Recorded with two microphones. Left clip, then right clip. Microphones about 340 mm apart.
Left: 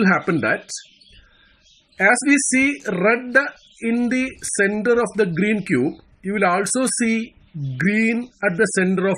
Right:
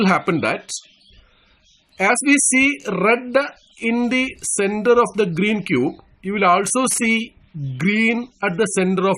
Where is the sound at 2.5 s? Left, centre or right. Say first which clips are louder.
Right 2 dB; centre.